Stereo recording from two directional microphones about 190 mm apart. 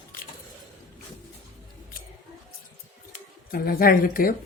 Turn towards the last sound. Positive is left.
turn(degrees=50)  # may be behind; listen again after turning